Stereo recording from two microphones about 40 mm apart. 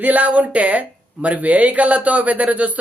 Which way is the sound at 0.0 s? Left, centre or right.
Right.